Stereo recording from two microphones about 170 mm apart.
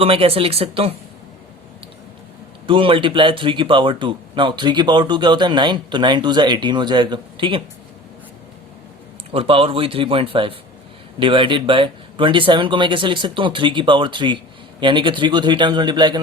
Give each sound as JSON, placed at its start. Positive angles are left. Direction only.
{"t": 0.0, "sound": "speech", "side_deg": -35}
{"t": 2.6, "sound": "speech", "side_deg": -30}
{"t": 9.3, "sound": "speech", "side_deg": -30}